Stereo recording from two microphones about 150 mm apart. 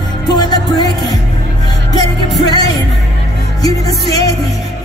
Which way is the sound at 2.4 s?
25° left (ahead or behind).